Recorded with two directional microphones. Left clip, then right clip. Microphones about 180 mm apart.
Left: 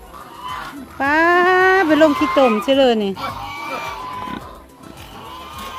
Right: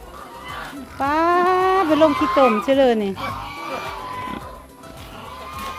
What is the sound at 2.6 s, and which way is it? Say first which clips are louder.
Speech: left 2 dB; 20° left (ahead or behind).